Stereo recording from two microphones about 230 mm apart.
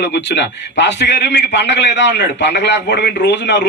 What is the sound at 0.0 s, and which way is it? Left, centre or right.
A man's voice, left.